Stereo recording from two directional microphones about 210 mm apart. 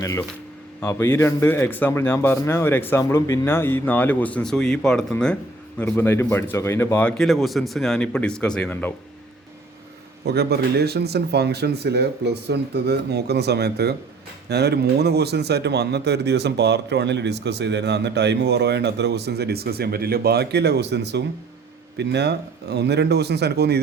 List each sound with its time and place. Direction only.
0.0 s speech: 15° left (ahead or behind)
10.2 s speech: 50° right (ahead or behind)